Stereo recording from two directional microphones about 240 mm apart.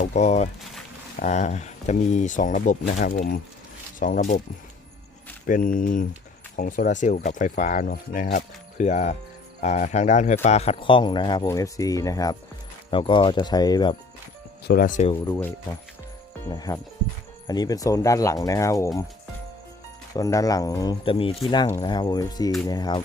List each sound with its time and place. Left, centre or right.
0.0 s speech: left
5.5 s speech: left; by 13.9 s centre
14.7 s speech: left
16.5 s speech: centre
20.1 s speech: centre